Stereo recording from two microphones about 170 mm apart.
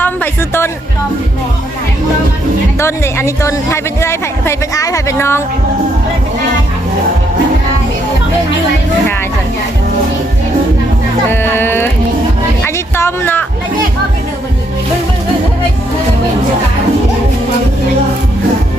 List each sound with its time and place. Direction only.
0.0 s music: 15° left (ahead or behind)
2.7 s a woman's voice: 15° left (ahead or behind)
11.3 s a woman's voice: 10° left (ahead or behind)
12.6 s a sound: 15° left (ahead or behind)